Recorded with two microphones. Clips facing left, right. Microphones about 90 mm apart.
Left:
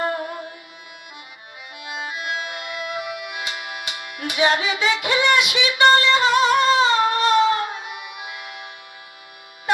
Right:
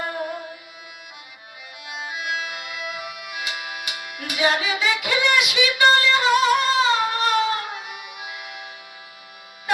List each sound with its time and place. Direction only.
2.2 s music: 30° left (ahead or behind)